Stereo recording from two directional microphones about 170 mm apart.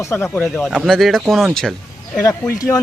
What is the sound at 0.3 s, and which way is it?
Speech, 10° left (ahead or behind).